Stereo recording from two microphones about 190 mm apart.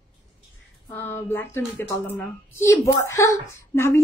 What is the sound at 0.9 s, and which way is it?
A woman's voice, 10° left (ahead or behind).